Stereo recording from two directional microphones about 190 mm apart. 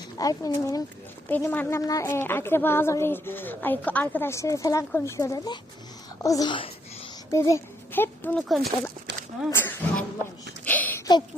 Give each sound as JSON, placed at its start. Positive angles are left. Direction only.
{"t": 0.2, "sound": "a woman's voice", "side_deg": 20}
{"t": 9.5, "sound": "speech", "side_deg": 10}
{"t": 10.7, "sound": "a sound", "side_deg": 10}